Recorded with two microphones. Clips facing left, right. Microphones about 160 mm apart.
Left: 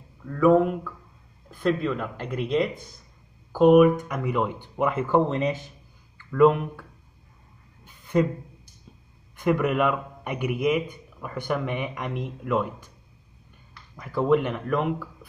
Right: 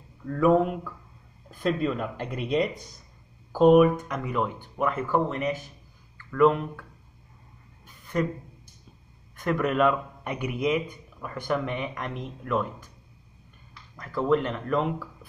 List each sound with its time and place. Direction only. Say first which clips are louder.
0.4 s speech: left 2 dB; centre (ahead or behind)
3.5 s a man's voice: left 2 dB; 5° left (ahead or behind)
8.1 s a man's voice: left 5 dB; 20° left (ahead or behind)
13.9 s a man's voice: left 2 dB; 15° left (ahead or behind)